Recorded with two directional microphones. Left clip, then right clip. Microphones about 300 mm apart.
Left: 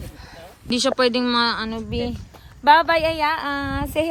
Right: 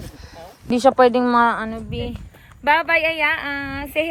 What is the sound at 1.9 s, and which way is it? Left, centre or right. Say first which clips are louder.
A child's voice: left 3 dB; centre.